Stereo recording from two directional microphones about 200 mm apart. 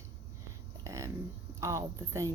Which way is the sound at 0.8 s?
15° right (ahead or behind).